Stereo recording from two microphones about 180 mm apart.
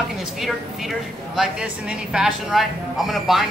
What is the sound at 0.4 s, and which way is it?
A woman's voice, centre (ahead or behind).